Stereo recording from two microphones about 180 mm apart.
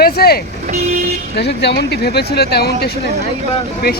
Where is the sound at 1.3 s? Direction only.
70° left (ahead or behind).